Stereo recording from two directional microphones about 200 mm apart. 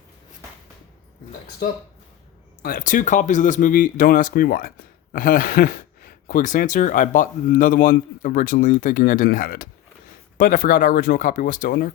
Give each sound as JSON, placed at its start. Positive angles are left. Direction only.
{"t": 2.6, "sound": "speech", "side_deg": 50}